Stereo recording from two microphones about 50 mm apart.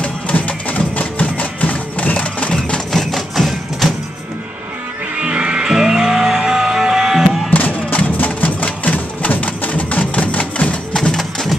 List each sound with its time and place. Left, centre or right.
0.0 s music: left
2.9 s music: centre
5.1 s music: right
7.5 s music: left
11.0 s music: centre